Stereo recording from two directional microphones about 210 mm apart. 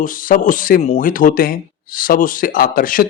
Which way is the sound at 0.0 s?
40° left (ahead or behind).